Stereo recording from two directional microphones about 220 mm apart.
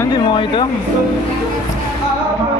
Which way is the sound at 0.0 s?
20° left (ahead or behind).